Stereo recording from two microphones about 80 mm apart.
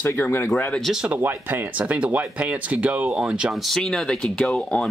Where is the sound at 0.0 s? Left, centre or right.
Left.